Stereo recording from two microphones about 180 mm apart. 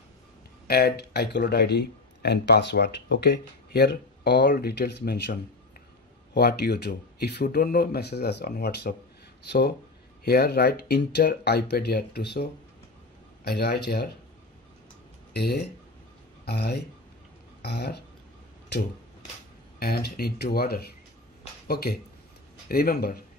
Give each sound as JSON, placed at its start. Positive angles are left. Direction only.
{"t": 0.7, "sound": "speech", "side_deg": 60}
{"t": 15.3, "sound": "speech", "side_deg": 60}
{"t": 19.8, "sound": "speech", "side_deg": 60}